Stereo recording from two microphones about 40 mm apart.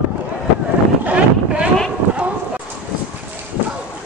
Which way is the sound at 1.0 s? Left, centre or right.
Right.